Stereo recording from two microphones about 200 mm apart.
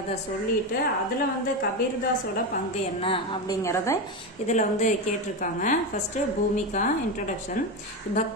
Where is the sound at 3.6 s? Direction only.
15° left (ahead or behind).